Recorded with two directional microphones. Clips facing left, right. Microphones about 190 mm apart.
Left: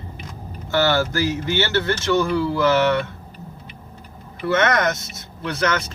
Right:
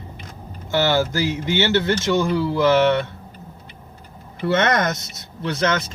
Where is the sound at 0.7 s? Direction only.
15° right (ahead or behind).